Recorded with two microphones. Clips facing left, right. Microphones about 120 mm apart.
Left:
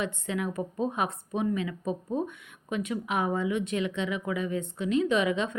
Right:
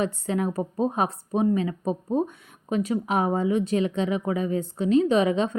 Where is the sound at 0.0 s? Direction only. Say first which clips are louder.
Right 5 dB; 35° right (ahead or behind).